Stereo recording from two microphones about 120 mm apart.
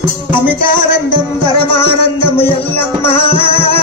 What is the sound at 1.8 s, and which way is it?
Music, 50° left (ahead or behind).